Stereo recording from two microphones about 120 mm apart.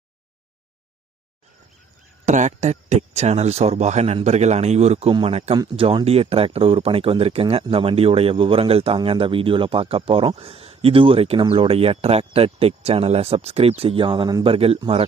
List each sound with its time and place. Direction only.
2.2 s speech: 85° right; by 5.5 s 60° right (ahead or behind)
5.7 s speech: 45° right (ahead or behind)